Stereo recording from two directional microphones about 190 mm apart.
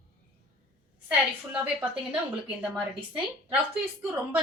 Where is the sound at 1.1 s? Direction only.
5° right (ahead or behind).